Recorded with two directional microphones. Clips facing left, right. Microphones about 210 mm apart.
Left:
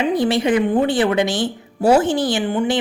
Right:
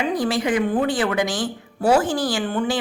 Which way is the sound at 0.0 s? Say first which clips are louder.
Left 4 dB; 25° left (ahead or behind).